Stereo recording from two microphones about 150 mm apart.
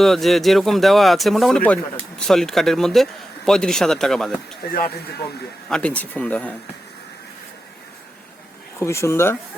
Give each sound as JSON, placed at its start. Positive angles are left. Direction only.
{"t": 0.0, "sound": "speech", "side_deg": 0}
{"t": 4.7, "sound": "speech", "side_deg": 70}
{"t": 5.6, "sound": "speech", "side_deg": 5}
{"t": 8.8, "sound": "speech", "side_deg": 15}